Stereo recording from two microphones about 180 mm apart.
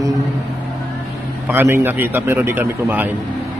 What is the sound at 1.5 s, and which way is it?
A man's voice, 10° right (ahead or behind).